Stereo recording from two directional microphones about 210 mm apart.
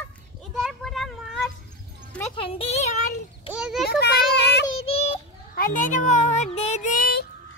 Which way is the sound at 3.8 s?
50° left (ahead or behind).